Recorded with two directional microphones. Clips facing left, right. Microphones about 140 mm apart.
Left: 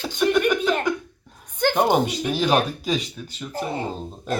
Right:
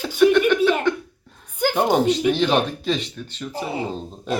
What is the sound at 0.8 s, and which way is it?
Cough, 10° left (ahead or behind).